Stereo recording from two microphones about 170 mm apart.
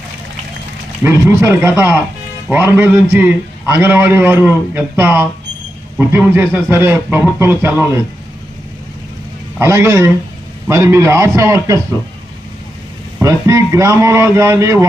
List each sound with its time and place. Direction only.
1.0 s a man's voice: 15° right (ahead or behind)
9.6 s a man's voice: 15° right (ahead or behind)
13.1 s a man's voice: 20° right (ahead or behind)